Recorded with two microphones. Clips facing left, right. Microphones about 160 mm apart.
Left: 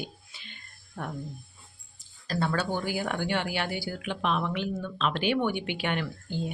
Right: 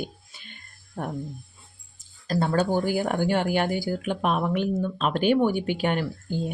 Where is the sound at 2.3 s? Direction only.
40° right (ahead or behind).